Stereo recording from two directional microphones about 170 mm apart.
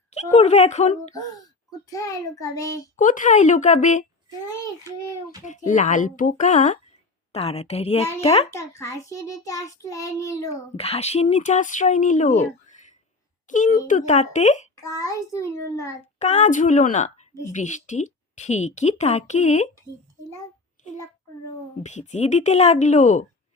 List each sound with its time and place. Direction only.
0.1 s a woman's voice: 40° left (ahead or behind)
1.9 s a child's voice: 20° left (ahead or behind)
2.9 s speech: 50° left (ahead or behind)
5.5 s a woman's voice: 45° left (ahead or behind)
8.4 s a child's voice: 15° left (ahead or behind)
10.5 s speech: 35° left (ahead or behind)
14.8 s a child's voice: 20° left (ahead or behind)
16.1 s speech: 40° left (ahead or behind)
20.8 s child singing: 45° left (ahead or behind)
21.8 s speech: 45° left (ahead or behind)